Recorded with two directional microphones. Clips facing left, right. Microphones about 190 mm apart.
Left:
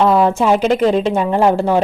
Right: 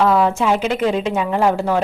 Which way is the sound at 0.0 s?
30° left (ahead or behind).